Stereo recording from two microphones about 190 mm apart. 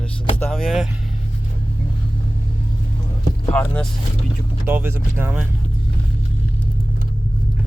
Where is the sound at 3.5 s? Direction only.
5° left (ahead or behind).